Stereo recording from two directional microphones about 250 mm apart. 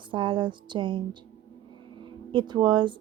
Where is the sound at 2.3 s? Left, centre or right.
Centre.